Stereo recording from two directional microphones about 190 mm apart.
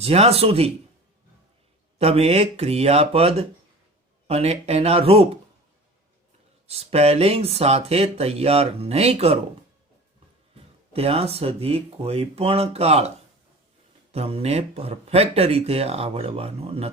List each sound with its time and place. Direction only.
0.0 s speech: 35° right (ahead or behind)
2.0 s speech: 35° right (ahead or behind)
6.7 s speech: 30° right (ahead or behind)
10.5 s speech: 30° right (ahead or behind)
14.1 s speech: 30° right (ahead or behind)